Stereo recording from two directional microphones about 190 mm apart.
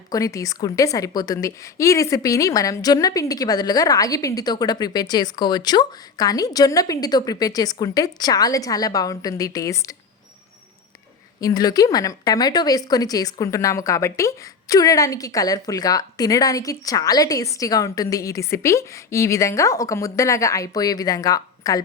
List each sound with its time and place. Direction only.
0.1 s speech: 15° left (ahead or behind)
11.3 s speech: 20° left (ahead or behind)